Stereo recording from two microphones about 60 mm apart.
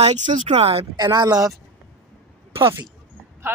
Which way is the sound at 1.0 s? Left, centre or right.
Right.